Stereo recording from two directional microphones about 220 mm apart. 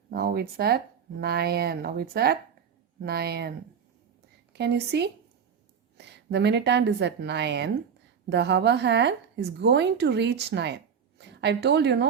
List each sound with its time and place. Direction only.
0.1 s a woman's voice: 45° right (ahead or behind)
4.5 s a woman's voice: 50° right (ahead or behind)